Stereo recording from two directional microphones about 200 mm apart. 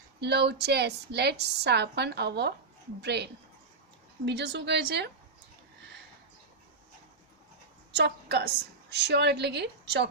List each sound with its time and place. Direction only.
0.2 s a woman's voice: 55° right (ahead or behind)
4.3 s a woman's voice: 60° right (ahead or behind)
7.9 s a woman's voice: 55° right (ahead or behind)